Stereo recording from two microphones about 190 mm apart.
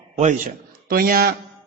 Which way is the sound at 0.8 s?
50° right (ahead or behind).